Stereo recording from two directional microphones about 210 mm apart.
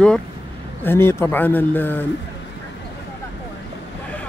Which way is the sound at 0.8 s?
10° left (ahead or behind).